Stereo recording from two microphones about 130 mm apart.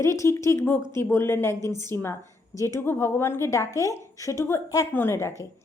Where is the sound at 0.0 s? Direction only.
25° left (ahead or behind).